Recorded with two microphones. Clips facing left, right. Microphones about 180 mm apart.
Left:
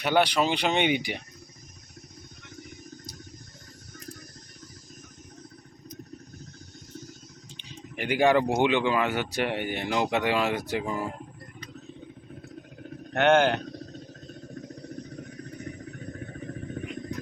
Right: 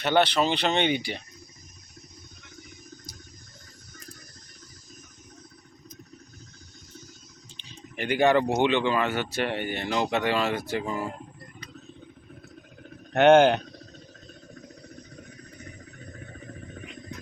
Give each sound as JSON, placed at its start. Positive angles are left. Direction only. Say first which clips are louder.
{"t": 0.0, "sound": "speech", "louder": "right 1 dB", "side_deg": 10}
{"t": 7.5, "sound": "speech", "louder": "even", "side_deg": 10}
{"t": 13.1, "sound": "speech", "louder": "right 4 dB", "side_deg": -20}
{"t": 15.1, "sound": "a sound", "louder": "left 6 dB", "side_deg": 45}